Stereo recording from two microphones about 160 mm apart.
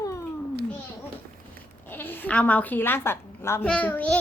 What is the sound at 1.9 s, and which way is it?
A woman's voice, 10° left (ahead or behind).